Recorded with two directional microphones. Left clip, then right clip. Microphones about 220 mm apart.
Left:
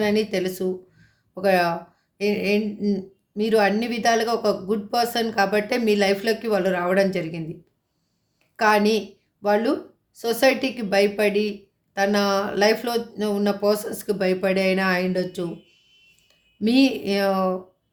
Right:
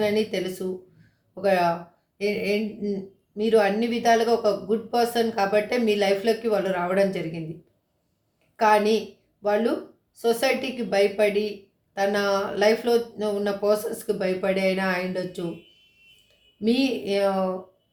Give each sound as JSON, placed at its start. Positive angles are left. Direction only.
{"t": 0.0, "sound": "speech", "side_deg": 45}
{"t": 8.5, "sound": "a woman's voice", "side_deg": 45}
{"t": 16.6, "sound": "speech", "side_deg": 45}